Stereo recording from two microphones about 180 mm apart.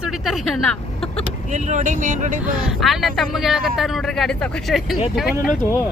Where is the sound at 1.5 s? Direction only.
40° right (ahead or behind).